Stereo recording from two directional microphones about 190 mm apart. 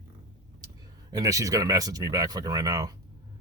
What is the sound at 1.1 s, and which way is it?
Speech, 20° right (ahead or behind).